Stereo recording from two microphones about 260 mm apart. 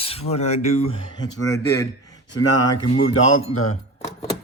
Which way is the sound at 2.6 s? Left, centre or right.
Left.